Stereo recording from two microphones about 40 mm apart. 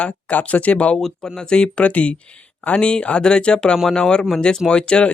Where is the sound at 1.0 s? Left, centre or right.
Centre.